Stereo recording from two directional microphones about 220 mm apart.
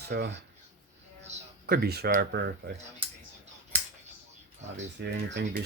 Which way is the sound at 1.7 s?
45° right (ahead or behind).